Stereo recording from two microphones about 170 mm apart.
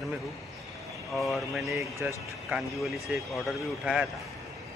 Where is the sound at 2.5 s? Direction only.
15° right (ahead or behind).